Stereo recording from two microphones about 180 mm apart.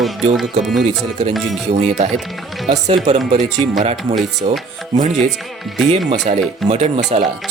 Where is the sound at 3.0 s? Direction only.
40° right (ahead or behind).